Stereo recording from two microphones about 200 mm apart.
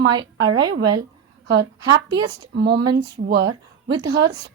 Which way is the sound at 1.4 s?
60° right (ahead or behind).